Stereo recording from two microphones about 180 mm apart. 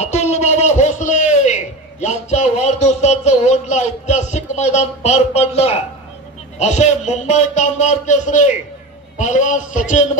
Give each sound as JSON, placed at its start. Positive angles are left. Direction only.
{"t": 0.0, "sound": "a man's voice", "side_deg": 40}